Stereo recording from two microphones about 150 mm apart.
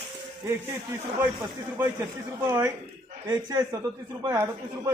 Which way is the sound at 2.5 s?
15° right (ahead or behind).